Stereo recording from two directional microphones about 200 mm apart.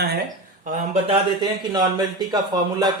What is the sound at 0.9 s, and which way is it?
Speech, 25° right (ahead or behind).